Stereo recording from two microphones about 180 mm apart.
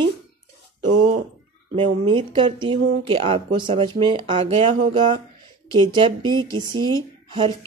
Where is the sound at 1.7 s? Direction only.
30° right (ahead or behind).